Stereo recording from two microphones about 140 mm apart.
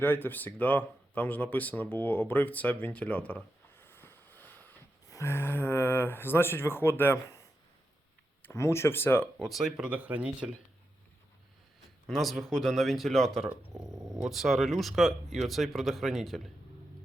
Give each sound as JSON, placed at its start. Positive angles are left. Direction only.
{"t": 0.0, "sound": "speech", "side_deg": 15}
{"t": 9.5, "sound": "speech", "side_deg": 0}
{"t": 12.0, "sound": "speech", "side_deg": 0}
{"t": 13.8, "sound": "dog", "side_deg": -25}
{"t": 14.2, "sound": "speech", "side_deg": 0}